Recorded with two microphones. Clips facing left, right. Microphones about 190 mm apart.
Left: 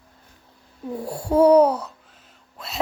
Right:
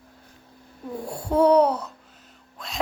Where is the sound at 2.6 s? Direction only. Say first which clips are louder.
Left 1 dB; 5° left (ahead or behind).